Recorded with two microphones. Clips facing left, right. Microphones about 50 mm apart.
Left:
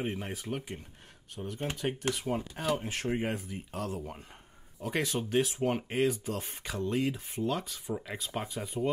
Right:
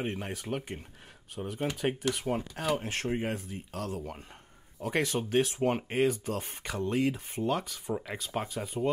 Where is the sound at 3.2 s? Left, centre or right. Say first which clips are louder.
Even; centre.